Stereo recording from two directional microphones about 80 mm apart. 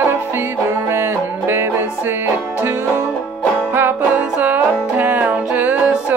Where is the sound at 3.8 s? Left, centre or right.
Right.